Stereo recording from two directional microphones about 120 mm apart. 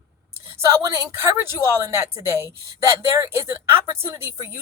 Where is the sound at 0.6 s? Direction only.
25° right (ahead or behind).